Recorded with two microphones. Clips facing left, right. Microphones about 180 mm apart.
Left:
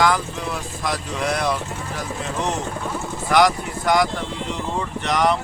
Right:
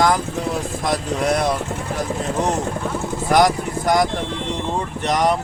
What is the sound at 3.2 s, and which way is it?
Speech, 45° right (ahead or behind).